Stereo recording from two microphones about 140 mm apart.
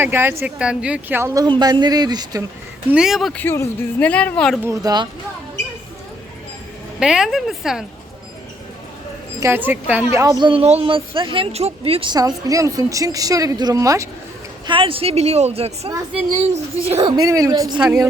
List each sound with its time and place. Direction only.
0.0 s speech: 15° right (ahead or behind)
1.5 s speech: 30° right (ahead or behind)
2.9 s a woman's voice: 5° right (ahead or behind)
3.3 s speech: 15° left (ahead or behind)
4.6 s speech: 25° right (ahead or behind)
7.0 s a woman's voice: 5° right (ahead or behind)
9.4 s speech: 15° right (ahead or behind)
10.4 s speech: 40° right (ahead or behind); by 14.1 s 25° right (ahead or behind)
14.7 s speech: 40° right (ahead or behind)
17.1 s speech: 25° right (ahead or behind)
17.7 s a woman's voice: 5° right (ahead or behind)